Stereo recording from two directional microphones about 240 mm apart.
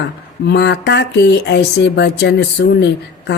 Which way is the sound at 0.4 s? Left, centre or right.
Left.